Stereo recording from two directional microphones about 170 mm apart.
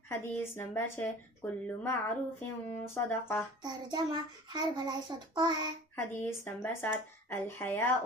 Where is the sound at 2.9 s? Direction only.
15° left (ahead or behind).